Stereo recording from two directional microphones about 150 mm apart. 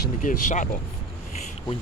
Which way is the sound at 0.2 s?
60° left (ahead or behind).